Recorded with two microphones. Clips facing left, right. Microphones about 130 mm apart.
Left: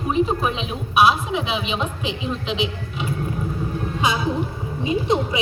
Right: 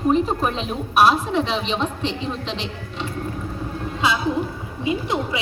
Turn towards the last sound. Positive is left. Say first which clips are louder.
# left 4 dB
turn(degrees=20)  # may be behind; listen again after turning